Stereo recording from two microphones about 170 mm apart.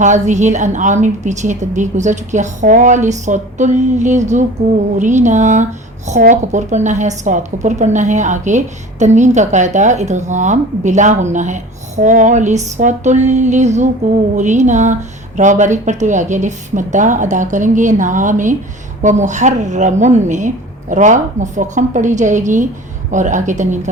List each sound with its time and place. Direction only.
0.0 s a woman's voice: 45° right (ahead or behind)